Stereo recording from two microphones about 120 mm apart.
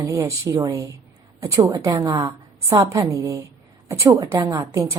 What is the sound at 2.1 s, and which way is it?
Speech, 40° right (ahead or behind).